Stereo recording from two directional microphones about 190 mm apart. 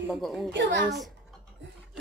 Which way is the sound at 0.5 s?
65° right (ahead or behind).